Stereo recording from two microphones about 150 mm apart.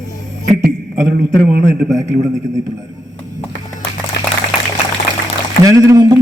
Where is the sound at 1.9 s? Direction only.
20° right (ahead or behind).